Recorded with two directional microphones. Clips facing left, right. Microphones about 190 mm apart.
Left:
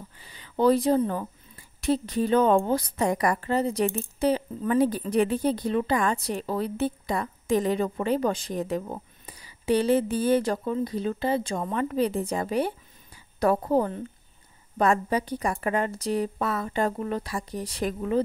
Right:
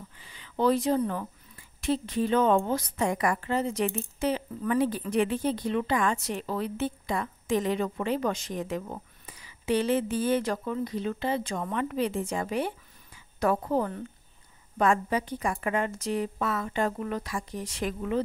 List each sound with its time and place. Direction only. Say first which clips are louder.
0.2 s a woman's voice: left 4 dB; 35° left (ahead or behind)